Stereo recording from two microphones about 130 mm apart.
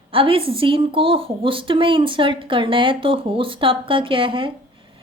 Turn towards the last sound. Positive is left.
turn(degrees=-40)  # may be behind; listen again after turning